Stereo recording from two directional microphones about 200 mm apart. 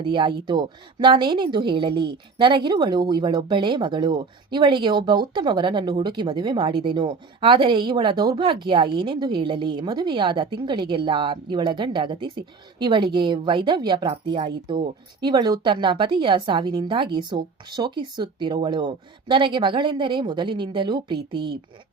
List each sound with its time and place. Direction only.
0.0 s speech: 25° right (ahead or behind)